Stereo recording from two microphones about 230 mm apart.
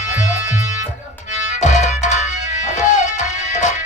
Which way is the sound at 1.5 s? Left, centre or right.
Left.